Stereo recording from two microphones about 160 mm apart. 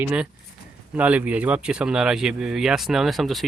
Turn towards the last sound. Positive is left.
turn(degrees=0)  # may be behind; listen again after turning